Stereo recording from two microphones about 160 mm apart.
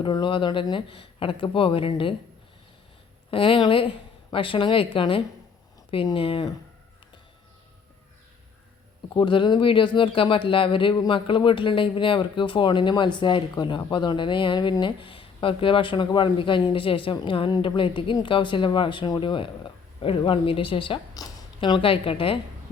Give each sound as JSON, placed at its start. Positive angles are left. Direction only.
{"t": 0.0, "sound": "speech", "side_deg": 30}
{"t": 3.2, "sound": "speech", "side_deg": 35}
{"t": 9.1, "sound": "speech", "side_deg": 30}